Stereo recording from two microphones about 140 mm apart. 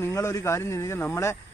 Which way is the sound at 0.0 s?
20° left (ahead or behind).